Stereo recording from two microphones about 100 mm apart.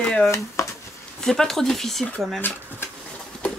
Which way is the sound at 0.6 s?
30° left (ahead or behind).